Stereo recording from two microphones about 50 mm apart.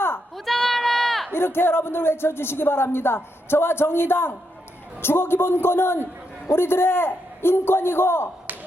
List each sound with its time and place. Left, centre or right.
0.3 s sheep: centre
1.3 s speech: left